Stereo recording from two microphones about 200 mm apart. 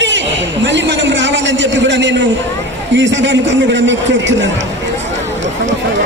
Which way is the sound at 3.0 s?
65° right (ahead or behind).